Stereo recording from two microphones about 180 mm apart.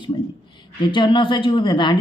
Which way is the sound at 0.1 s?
30° left (ahead or behind).